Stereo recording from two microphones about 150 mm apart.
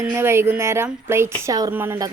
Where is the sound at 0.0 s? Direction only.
15° right (ahead or behind).